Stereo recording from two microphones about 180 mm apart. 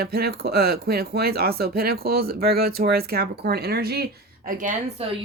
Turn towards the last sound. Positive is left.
turn(degrees=-40)  # may be behind; listen again after turning